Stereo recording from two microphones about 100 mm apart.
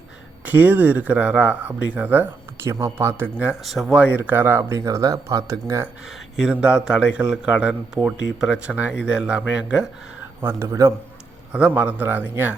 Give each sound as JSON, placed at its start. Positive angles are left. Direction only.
{"t": 0.4, "sound": "a man's voice", "side_deg": -20}
{"t": 2.6, "sound": "speech", "side_deg": -30}
{"t": 3.3, "sound": "a man's voice", "side_deg": -15}
{"t": 3.6, "sound": "a man's voice", "side_deg": 0}
{"t": 6.1, "sound": "a man's voice", "side_deg": -5}
{"t": 10.4, "sound": "speech", "side_deg": -30}
{"t": 11.5, "sound": "a man's voice", "side_deg": -10}